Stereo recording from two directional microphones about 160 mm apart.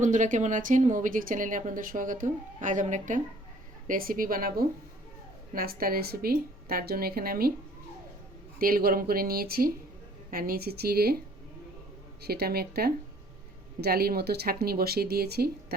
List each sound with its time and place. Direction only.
0.0 s a woman's voice: 50° right (ahead or behind); by 7.5 s 70° right (ahead or behind)
8.5 s a woman's voice: 65° right (ahead or behind)
12.2 s a woman's voice: 80° right